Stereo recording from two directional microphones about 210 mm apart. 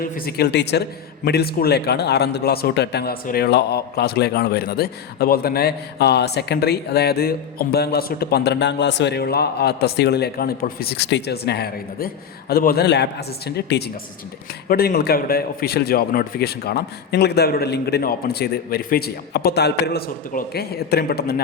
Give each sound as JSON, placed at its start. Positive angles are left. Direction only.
{"t": 0.0, "sound": "a man's voice", "side_deg": 45}